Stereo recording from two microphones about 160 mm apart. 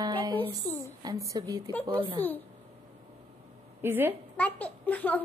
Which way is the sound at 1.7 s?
10° left (ahead or behind).